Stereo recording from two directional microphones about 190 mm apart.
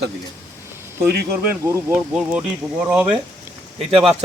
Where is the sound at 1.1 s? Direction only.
55° right (ahead or behind).